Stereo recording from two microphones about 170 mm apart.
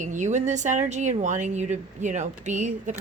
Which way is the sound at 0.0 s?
45° right (ahead or behind).